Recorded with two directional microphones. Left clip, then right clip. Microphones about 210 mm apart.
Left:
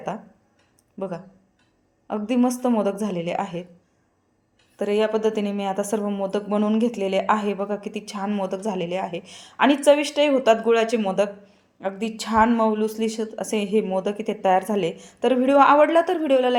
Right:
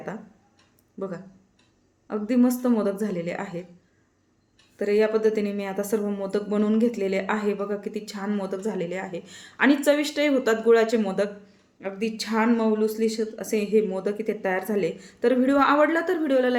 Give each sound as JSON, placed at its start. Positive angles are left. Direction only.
{"t": 0.9, "sound": "speech", "side_deg": 15}
{"t": 2.3, "sound": "a woman's voice", "side_deg": 15}
{"t": 4.8, "sound": "a woman's voice", "side_deg": 20}